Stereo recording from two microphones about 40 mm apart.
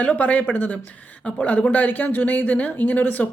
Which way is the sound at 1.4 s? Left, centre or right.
Left.